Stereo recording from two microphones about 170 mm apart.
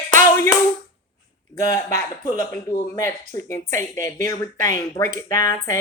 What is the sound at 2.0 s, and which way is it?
Speech, 15° left (ahead or behind).